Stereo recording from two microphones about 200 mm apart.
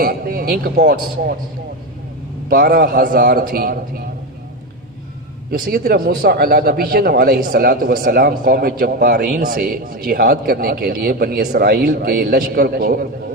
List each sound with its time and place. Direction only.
0.0 s a man's voice: 45° right (ahead or behind)
2.4 s a man's voice: 45° right (ahead or behind)
5.5 s a man's voice: 45° right (ahead or behind)